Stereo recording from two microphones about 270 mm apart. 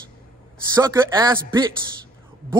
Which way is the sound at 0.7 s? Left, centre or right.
Centre.